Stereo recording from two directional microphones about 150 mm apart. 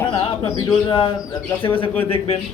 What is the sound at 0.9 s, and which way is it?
Speech, 30° left (ahead or behind).